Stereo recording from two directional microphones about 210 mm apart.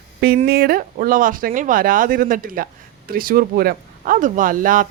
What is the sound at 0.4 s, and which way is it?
Speech, 45° right (ahead or behind).